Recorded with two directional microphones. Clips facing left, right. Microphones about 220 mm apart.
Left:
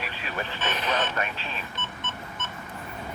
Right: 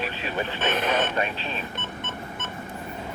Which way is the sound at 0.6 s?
55° right (ahead or behind).